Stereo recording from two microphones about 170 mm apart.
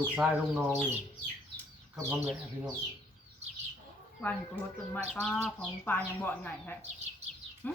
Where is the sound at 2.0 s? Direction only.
15° right (ahead or behind).